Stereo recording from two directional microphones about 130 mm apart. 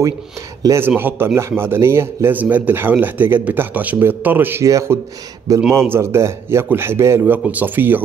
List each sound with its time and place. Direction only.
0.6 s a man's voice: 20° right (ahead or behind)